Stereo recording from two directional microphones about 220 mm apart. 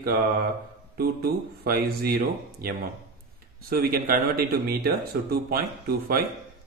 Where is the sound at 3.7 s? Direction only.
40° right (ahead or behind).